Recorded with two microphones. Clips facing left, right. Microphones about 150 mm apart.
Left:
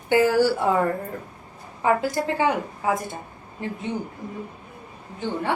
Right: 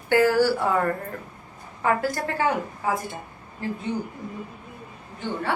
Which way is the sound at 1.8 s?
20° left (ahead or behind).